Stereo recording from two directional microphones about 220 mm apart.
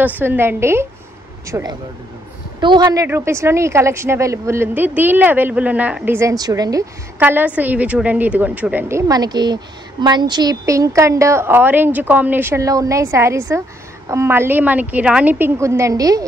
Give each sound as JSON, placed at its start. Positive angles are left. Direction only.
{"t": 0.0, "sound": "a woman's voice", "side_deg": -10}